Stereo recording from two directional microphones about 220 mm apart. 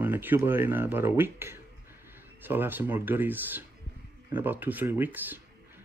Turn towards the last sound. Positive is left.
turn(degrees=-10)  # may be behind; listen again after turning